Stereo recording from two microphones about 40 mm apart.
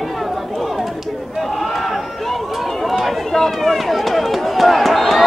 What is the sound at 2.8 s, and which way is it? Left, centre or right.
Run, centre.